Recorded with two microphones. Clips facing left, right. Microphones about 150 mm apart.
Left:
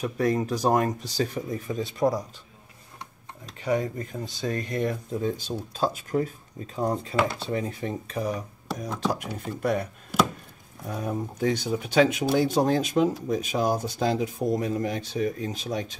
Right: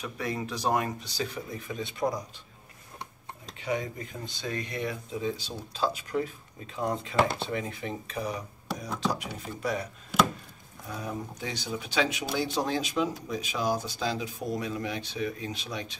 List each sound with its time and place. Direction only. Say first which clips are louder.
0.0 s speech: left 8 dB; 45° left (ahead or behind)
3.6 s speech: left 5 dB; 40° left (ahead or behind)
10.9 s speech: left 5 dB; 50° left (ahead or behind)